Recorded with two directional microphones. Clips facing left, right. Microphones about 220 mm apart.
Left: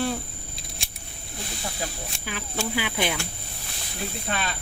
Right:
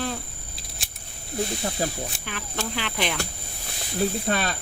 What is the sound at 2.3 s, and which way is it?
Speech, 5° left (ahead or behind).